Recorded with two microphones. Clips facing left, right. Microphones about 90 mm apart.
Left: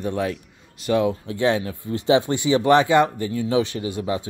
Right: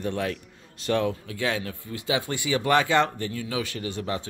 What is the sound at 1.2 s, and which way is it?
Speech, 25° left (ahead or behind).